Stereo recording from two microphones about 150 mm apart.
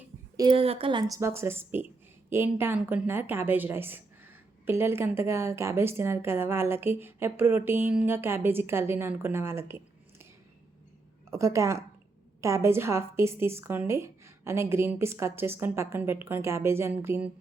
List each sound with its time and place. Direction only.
0.3 s a woman's voice: 30° right (ahead or behind); by 10.2 s 15° right (ahead or behind)
11.3 s a woman's voice: 20° right (ahead or behind)